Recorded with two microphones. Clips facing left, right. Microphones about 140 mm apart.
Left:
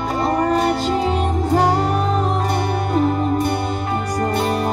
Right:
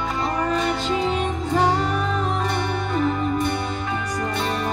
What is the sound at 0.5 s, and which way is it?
Music, 40° left (ahead or behind).